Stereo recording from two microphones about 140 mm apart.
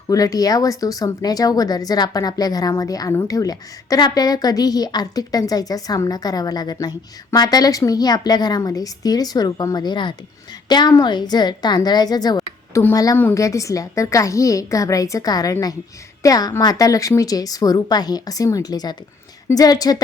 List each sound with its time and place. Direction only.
0.1 s speech: 25° left (ahead or behind)
13.1 s a woman's voice: 15° left (ahead or behind)